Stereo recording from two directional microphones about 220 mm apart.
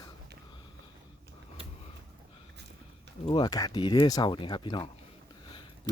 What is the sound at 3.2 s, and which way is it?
Speech, 20° left (ahead or behind).